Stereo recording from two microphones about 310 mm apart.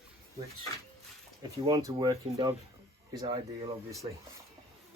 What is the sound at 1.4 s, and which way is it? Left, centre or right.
Speech, centre.